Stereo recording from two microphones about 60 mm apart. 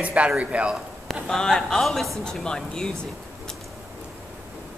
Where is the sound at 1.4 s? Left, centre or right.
Centre.